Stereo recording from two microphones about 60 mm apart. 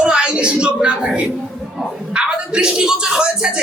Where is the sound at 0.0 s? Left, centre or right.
Centre.